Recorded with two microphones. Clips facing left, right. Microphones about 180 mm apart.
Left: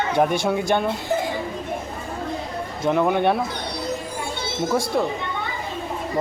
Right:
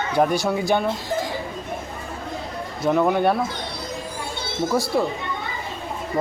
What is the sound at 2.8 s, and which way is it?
Speech, centre (ahead or behind).